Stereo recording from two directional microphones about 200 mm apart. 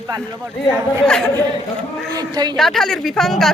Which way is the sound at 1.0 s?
Centre (ahead or behind).